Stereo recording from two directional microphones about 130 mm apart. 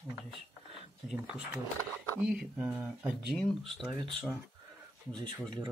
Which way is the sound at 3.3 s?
Centre (ahead or behind).